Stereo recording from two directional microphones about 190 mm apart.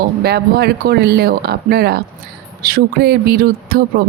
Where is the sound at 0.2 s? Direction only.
55° right (ahead or behind).